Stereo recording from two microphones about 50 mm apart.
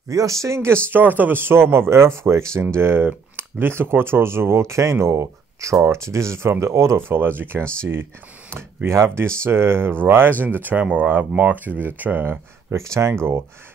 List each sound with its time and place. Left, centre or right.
0.3 s speech: right
2.7 s speech: right
7.0 s speech: right
10.4 s speech: right
12.7 s speech: right
13.1 s speech: right